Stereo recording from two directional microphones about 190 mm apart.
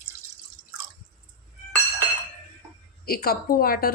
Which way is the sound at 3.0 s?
55° left (ahead or behind).